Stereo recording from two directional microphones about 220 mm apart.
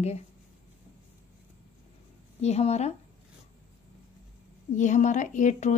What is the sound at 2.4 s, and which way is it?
Speech, 30° left (ahead or behind).